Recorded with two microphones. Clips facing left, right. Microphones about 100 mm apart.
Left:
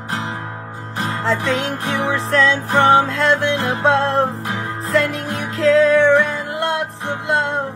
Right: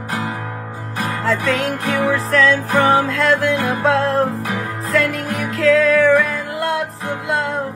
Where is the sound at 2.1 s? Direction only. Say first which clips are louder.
Even; centre (ahead or behind).